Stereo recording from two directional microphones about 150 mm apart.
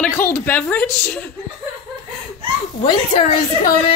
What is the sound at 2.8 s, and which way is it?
Speech, 45° left (ahead or behind).